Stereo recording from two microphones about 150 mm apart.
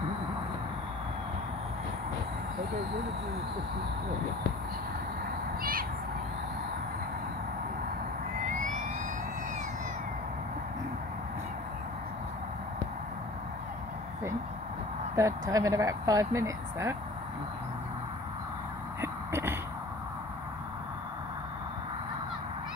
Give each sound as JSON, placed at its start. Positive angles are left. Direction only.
{"t": 5.6, "sound": "owl", "side_deg": -75}
{"t": 15.1, "sound": "speech", "side_deg": -20}
{"t": 18.9, "sound": "a sound", "side_deg": -15}